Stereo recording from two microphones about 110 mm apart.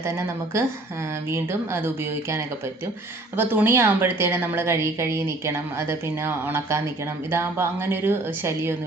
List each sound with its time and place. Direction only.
0.0 s a woman's voice: 25° right (ahead or behind)